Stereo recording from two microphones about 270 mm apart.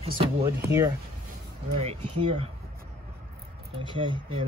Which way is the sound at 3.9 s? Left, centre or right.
Centre.